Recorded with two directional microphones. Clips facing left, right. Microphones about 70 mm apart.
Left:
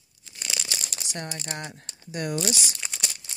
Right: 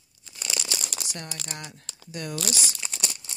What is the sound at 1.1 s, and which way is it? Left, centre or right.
Speech, left.